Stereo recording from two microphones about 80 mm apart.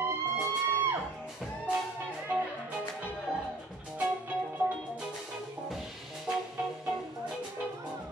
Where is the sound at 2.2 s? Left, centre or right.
Centre.